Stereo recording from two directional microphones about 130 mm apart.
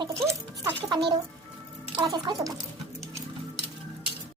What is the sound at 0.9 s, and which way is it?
A child's voice, 30° right (ahead or behind).